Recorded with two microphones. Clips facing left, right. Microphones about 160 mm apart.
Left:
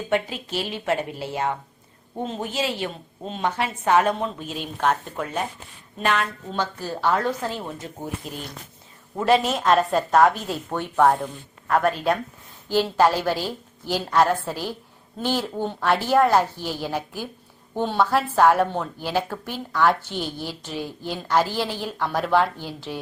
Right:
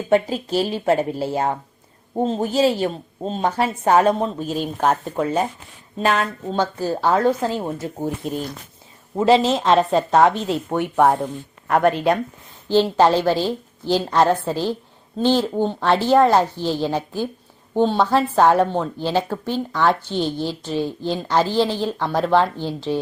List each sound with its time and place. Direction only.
0.1 s a woman's voice: 35° right (ahead or behind)
7.4 s a woman's voice: 25° right (ahead or behind)
8.0 s speech: 45° right (ahead or behind)
9.1 s a woman's voice: 25° right (ahead or behind)
11.8 s speech: centre (ahead or behind)
12.6 s a woman's voice: 25° right (ahead or behind)
15.5 s a woman's voice: 25° right (ahead or behind)